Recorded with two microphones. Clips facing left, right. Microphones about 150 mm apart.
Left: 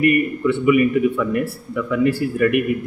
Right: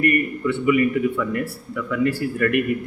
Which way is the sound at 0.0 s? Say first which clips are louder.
Left 4 dB; 15° left (ahead or behind).